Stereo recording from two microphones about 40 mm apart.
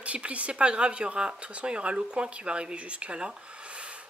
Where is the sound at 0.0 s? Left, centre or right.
Right.